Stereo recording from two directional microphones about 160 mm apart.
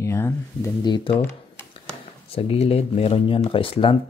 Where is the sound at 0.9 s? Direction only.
35° left (ahead or behind).